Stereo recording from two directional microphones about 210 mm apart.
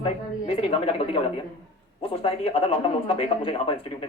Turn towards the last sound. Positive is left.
turn(degrees=25)  # may be behind; listen again after turning